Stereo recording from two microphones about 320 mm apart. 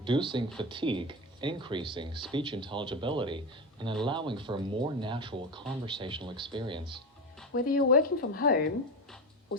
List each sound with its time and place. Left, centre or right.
0.0 s speech: centre
7.5 s speech: left